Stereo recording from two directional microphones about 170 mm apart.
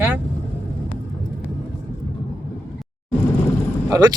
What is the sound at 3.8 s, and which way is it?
Vehicle, 20° right (ahead or behind).